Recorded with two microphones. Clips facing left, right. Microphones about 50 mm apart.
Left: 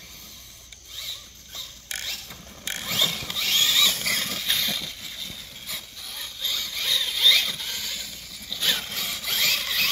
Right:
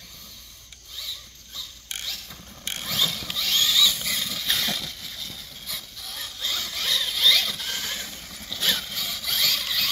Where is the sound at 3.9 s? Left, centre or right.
Left.